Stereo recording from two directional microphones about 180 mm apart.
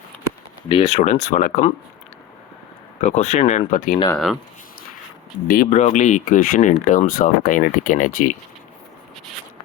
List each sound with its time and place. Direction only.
0.7 s speech: 35° left (ahead or behind)
3.0 s speech: 40° left (ahead or behind)
5.5 s speech: 50° left (ahead or behind)